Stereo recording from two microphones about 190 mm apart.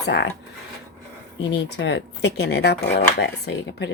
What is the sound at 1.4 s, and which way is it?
A woman's voice, 65° left (ahead or behind).